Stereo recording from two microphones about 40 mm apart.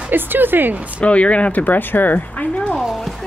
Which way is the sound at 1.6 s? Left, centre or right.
Left.